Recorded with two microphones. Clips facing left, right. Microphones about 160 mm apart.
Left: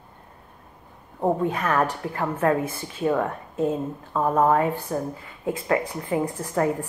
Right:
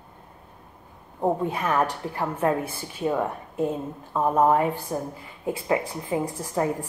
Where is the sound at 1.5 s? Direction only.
10° right (ahead or behind).